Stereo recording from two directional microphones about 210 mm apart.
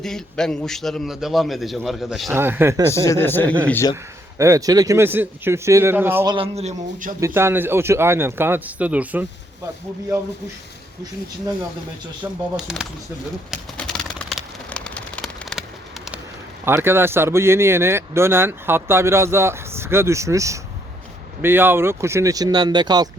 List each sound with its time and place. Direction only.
0.0 s a man's voice: centre (ahead or behind)
2.9 s speech: 15° left (ahead or behind)
4.4 s speech: 15° right (ahead or behind)
6.2 s a man's voice: 25° right (ahead or behind)
7.2 s speech: 10° right (ahead or behind)
12.2 s a man's voice: 5° right (ahead or behind)
13.5 s bird: 5° left (ahead or behind)
16.6 s speech: 10° right (ahead or behind)